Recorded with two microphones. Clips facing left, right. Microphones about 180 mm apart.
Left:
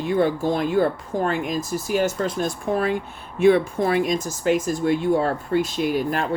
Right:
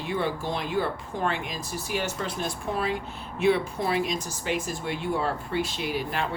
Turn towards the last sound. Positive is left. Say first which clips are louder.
# left 7 dB
turn(degrees=45)  # may be behind; listen again after turning